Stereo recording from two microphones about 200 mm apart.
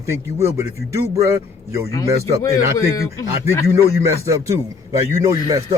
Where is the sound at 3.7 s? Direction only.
15° right (ahead or behind).